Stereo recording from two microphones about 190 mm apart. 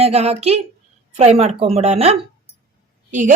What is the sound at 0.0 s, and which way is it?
Speech, 35° right (ahead or behind).